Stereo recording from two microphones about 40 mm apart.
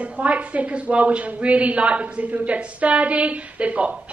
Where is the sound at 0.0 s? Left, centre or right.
Right.